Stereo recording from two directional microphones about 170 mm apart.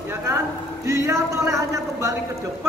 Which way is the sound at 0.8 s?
20° right (ahead or behind).